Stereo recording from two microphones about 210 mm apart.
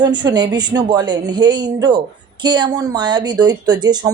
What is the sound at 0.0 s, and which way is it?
Speech, 20° right (ahead or behind).